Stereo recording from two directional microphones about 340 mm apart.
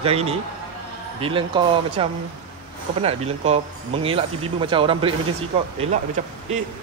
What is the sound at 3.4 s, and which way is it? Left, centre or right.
Speech, centre.